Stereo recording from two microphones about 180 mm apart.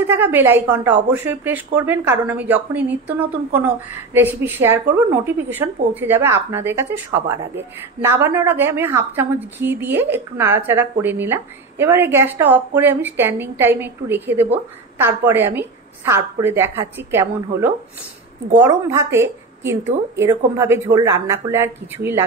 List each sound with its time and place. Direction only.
0.0 s a woman's voice: 10° right (ahead or behind)
18.6 s a woman's voice: 15° right (ahead or behind)